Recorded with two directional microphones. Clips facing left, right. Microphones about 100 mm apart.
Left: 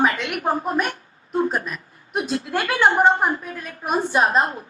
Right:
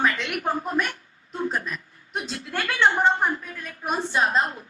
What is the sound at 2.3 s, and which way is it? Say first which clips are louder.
Speech: left 6 dB; 30° left (ahead or behind).